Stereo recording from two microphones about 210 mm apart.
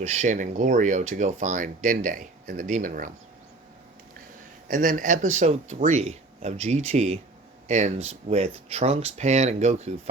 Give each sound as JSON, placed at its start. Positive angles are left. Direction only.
{"t": 0.0, "sound": "speech", "side_deg": -35}
{"t": 4.7, "sound": "speech", "side_deg": -40}